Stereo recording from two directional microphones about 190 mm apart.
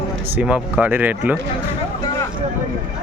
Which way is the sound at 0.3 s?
5° right (ahead or behind).